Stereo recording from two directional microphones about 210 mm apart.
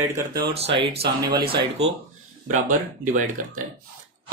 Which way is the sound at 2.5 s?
40° right (ahead or behind).